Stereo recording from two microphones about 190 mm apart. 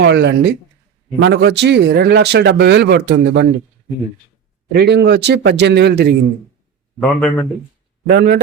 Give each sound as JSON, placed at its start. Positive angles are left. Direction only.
{"t": 0.0, "sound": "speech", "side_deg": -65}
{"t": 4.7, "sound": "speech", "side_deg": -60}
{"t": 7.0, "sound": "a man's voice", "side_deg": 5}
{"t": 8.0, "sound": "speech", "side_deg": -60}